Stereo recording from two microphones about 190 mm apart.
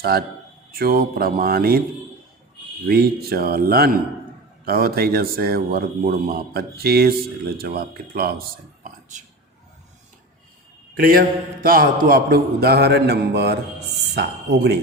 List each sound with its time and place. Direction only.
0.0 s a man's voice: 55° right (ahead or behind)
2.8 s a man's voice: 55° right (ahead or behind)
8.8 s a sound: 40° right (ahead or behind)
10.9 s a man's voice: 50° right (ahead or behind)